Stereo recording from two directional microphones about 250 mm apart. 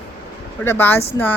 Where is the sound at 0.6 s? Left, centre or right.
Centre.